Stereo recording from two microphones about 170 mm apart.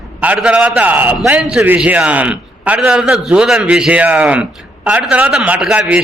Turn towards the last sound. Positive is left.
turn(degrees=-5)  # may be behind; listen again after turning